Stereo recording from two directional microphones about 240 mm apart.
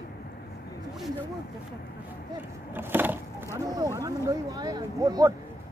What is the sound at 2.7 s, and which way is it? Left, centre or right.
Speech, centre.